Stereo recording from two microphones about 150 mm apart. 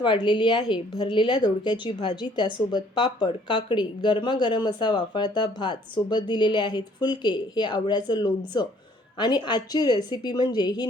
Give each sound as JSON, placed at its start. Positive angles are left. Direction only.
{"t": 0.0, "sound": "a woman's voice", "side_deg": 30}